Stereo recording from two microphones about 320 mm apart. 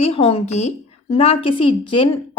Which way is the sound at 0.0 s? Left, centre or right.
Centre.